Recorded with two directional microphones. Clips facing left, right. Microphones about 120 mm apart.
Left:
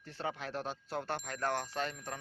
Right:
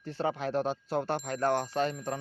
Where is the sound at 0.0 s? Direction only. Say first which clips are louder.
Right 8 dB; 35° right (ahead or behind).